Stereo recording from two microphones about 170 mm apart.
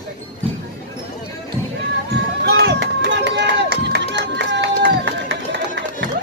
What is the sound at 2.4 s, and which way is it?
Run, 75° right (ahead or behind).